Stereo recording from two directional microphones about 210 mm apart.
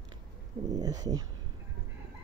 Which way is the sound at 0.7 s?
15° right (ahead or behind).